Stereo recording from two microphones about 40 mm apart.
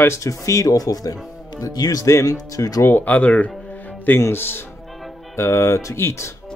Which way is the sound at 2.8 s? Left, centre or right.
Left.